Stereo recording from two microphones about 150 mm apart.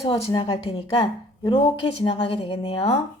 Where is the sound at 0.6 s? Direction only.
40° left (ahead or behind).